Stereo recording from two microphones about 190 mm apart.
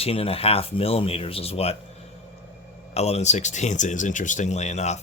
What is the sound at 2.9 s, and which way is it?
Speech, 35° left (ahead or behind).